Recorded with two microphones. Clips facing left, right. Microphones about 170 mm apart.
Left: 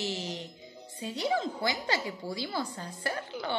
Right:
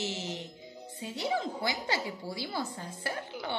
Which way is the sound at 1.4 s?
20° left (ahead or behind).